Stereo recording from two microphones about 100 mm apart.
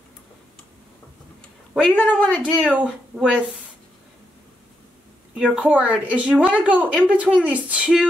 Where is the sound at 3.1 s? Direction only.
25° right (ahead or behind).